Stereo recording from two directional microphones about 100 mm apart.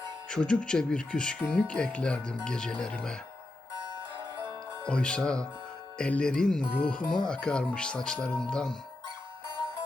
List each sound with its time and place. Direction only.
0.3 s speech: 5° left (ahead or behind)
3.8 s music: 50° right (ahead or behind)
4.9 s speech: 10° left (ahead or behind)